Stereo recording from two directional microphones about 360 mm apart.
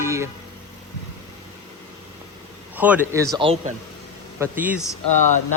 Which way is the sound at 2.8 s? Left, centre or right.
Centre.